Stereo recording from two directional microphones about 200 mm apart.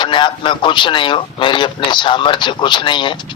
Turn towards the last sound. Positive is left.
turn(degrees=25)  # may be behind; listen again after turning